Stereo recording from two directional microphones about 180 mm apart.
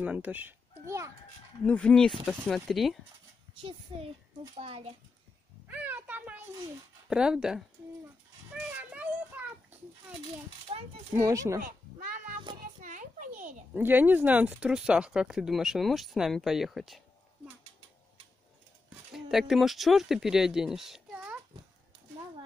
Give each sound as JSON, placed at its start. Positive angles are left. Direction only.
{"t": 0.0, "sound": "a child's voice", "side_deg": -10}
{"t": 1.6, "sound": "speech", "side_deg": 5}
{"t": 3.9, "sound": "a child's voice", "side_deg": -30}
{"t": 5.7, "sound": "speech", "side_deg": -10}
{"t": 8.7, "sound": "speech", "side_deg": -10}
{"t": 10.7, "sound": "speech", "side_deg": -30}
{"t": 11.1, "sound": "speech", "side_deg": -20}
{"t": 12.8, "sound": "a child's voice", "side_deg": -45}
{"t": 13.7, "sound": "speech", "side_deg": -10}
{"t": 19.1, "sound": "speech", "side_deg": 0}